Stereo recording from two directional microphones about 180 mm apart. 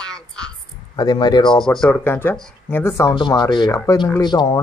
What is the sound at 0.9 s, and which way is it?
Speech, 25° left (ahead or behind).